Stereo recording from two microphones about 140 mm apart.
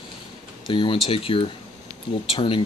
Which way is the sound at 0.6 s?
35° left (ahead or behind).